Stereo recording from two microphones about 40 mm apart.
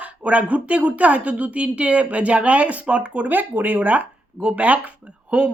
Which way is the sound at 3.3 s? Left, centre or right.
Right.